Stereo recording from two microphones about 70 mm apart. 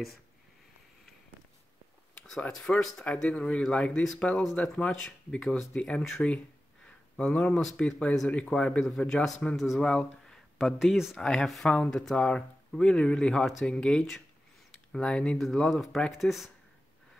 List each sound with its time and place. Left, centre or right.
2.4 s speech: centre
6.2 s a sound: centre
7.7 s speech: centre
10.8 s speech: centre
11.1 s speech: centre
15.3 s speech: centre